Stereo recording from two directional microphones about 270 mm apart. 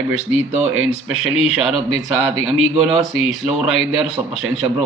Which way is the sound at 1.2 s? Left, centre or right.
Centre.